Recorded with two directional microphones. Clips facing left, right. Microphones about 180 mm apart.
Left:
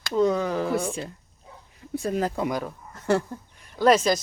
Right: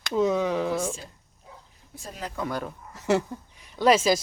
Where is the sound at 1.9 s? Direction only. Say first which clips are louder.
Left 12 dB; 60° left (ahead or behind).